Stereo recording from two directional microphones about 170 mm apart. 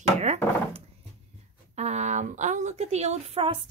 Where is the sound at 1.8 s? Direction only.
40° right (ahead or behind).